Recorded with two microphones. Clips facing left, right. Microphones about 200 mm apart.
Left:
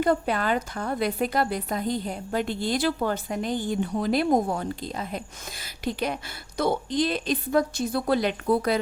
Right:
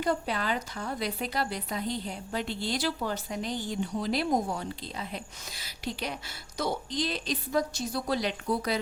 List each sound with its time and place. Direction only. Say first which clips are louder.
0.0 s a woman's voice: left 6 dB; 55° left (ahead or behind)